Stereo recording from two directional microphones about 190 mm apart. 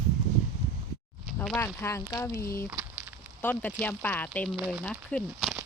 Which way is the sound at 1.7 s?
15° left (ahead or behind).